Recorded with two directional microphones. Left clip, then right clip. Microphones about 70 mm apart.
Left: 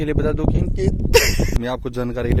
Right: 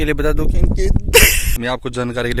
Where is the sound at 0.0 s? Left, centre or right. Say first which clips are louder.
Right 3 dB; centre.